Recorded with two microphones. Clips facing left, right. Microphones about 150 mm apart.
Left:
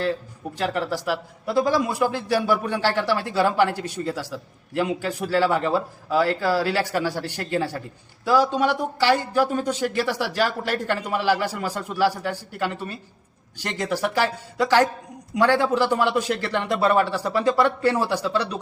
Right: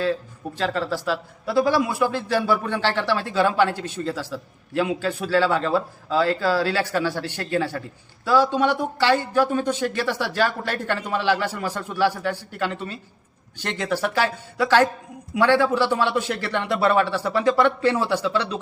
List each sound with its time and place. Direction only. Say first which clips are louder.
0.6 s a man's voice: even; 15° left (ahead or behind)
13.6 s a man's voice: even; 10° left (ahead or behind)